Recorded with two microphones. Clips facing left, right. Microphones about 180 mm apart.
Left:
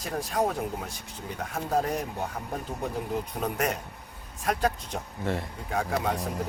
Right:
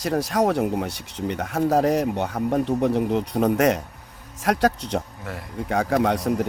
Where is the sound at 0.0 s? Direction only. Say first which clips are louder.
Right 7 dB; 85° right.